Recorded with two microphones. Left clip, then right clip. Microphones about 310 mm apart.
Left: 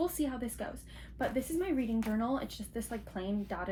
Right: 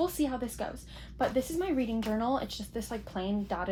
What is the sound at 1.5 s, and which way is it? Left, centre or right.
Speech, right.